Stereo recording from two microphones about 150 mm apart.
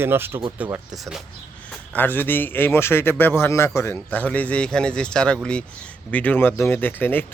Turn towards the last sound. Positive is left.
turn(degrees=15)  # may be behind; listen again after turning